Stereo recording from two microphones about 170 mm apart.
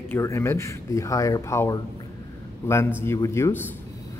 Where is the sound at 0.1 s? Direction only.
15° left (ahead or behind).